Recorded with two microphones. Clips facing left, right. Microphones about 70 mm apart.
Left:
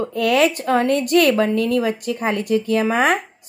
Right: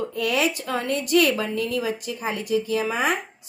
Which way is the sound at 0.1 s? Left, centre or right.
Left.